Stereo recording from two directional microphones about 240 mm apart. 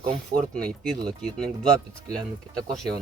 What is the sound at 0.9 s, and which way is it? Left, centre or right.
Speech, centre.